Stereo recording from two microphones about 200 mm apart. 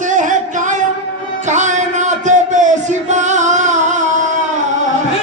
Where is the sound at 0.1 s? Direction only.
40° right (ahead or behind).